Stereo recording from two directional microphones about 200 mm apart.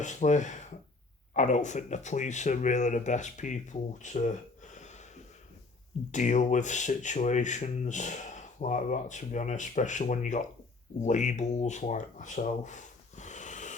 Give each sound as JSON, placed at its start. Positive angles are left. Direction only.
{"t": 0.0, "sound": "speech", "side_deg": 35}
{"t": 6.1, "sound": "speech", "side_deg": 35}